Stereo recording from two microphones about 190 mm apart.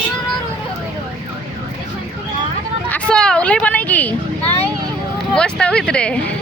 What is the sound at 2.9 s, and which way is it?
Speech, 5° left (ahead or behind).